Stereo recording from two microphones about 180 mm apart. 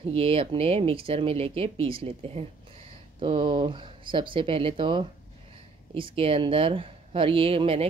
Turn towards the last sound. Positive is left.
turn(degrees=-30)  # may be behind; listen again after turning